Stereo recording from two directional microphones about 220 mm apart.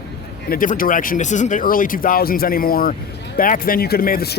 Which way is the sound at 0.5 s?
40° left (ahead or behind).